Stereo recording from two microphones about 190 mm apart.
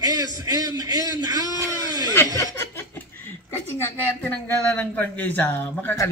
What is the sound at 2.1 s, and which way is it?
Speech, 10° left (ahead or behind).